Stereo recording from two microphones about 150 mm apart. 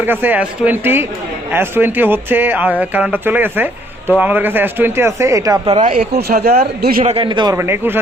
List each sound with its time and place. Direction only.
0.0 s a man's voice: 15° right (ahead or behind)
5.8 s speech: 70° right (ahead or behind)
6.2 s speech: 90° right
7.0 s speech: 45° right (ahead or behind)
7.3 s speech: 30° right (ahead or behind)
7.5 s a man's voice: 15° right (ahead or behind)